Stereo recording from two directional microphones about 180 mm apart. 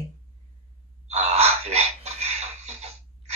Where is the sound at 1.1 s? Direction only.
35° right (ahead or behind).